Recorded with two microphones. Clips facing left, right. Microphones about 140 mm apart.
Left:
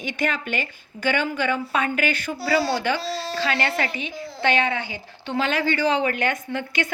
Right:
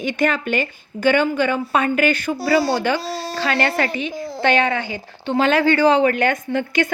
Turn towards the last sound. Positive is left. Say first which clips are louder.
# right 7 dB
turn(degrees=-45)  # may be behind; listen again after turning